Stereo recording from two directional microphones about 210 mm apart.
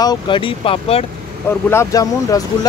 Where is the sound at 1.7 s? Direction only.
15° left (ahead or behind).